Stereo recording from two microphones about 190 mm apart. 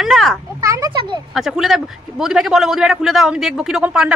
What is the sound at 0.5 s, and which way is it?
Speech, 15° right (ahead or behind).